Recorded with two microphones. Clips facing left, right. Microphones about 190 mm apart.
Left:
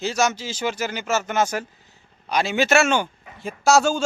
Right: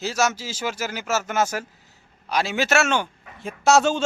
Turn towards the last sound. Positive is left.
turn(degrees=10)  # may be behind; listen again after turning